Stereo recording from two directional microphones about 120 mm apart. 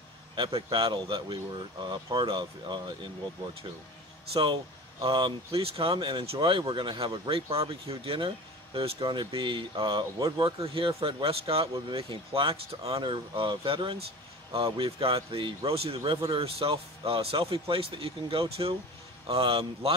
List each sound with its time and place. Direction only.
0.4 s speech: 45° right (ahead or behind)
4.3 s a man's voice: 45° right (ahead or behind)
11.6 s speech: 35° right (ahead or behind)
12.3 s a man's voice: 50° right (ahead or behind)